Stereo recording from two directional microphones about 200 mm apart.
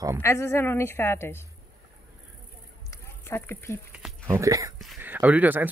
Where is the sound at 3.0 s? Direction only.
10° left (ahead or behind).